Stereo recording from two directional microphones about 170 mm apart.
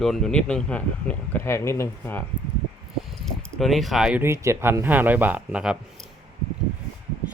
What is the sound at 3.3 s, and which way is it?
Speech, centre (ahead or behind).